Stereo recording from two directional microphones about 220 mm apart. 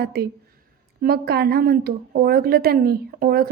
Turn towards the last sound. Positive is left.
turn(degrees=-45)  # may be behind; listen again after turning